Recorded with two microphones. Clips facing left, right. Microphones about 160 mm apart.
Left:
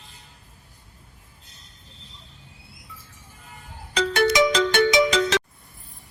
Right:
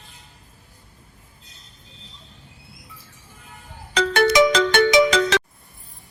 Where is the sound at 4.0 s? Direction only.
70° right (ahead or behind).